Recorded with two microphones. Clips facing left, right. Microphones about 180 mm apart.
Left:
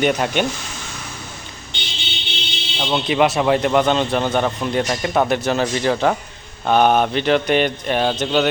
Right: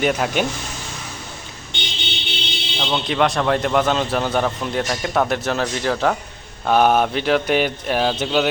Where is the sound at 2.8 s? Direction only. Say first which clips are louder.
Left 2 dB; 5° left (ahead or behind).